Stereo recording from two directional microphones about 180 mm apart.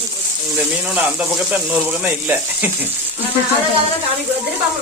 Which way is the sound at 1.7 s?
10° right (ahead or behind).